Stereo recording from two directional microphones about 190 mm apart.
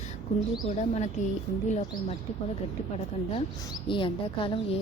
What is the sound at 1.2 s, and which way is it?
Speech, 40° left (ahead or behind).